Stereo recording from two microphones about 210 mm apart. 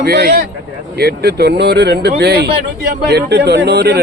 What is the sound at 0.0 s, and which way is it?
Speech, 50° right (ahead or behind).